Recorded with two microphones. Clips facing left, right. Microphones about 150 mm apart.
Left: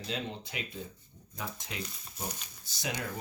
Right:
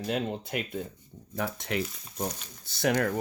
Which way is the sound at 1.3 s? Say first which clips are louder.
Right 10 dB; 65° right (ahead or behind).